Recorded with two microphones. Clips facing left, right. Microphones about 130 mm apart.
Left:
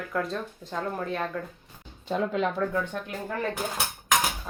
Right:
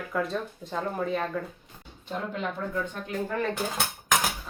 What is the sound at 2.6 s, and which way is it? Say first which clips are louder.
Speech: left 6 dB; 90° left.